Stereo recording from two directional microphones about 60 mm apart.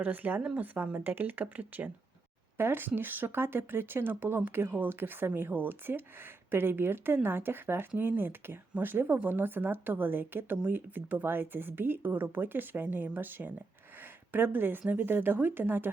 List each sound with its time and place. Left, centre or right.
0.0 s speech: right
2.6 s speech: right